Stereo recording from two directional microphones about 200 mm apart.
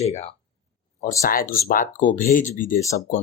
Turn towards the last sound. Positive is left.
turn(degrees=35)  # may be behind; listen again after turning